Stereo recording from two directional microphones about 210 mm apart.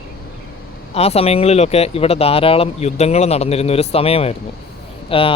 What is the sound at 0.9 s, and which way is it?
Speech, 30° left (ahead or behind).